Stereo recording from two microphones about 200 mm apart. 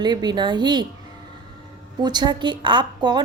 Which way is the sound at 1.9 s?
20° right (ahead or behind).